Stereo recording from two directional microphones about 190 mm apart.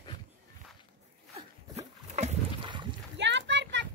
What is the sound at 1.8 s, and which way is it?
Wild animals, 35° right (ahead or behind).